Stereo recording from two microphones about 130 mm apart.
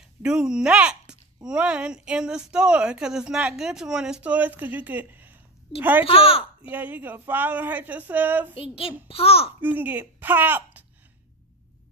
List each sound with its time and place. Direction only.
0.2 s speech: 5° right (ahead or behind)
6.0 s a child's voice: 45° left (ahead or behind)
6.7 s speech: 15° right (ahead or behind)
8.5 s a child's voice: 45° left (ahead or behind)
9.6 s speech: 15° right (ahead or behind)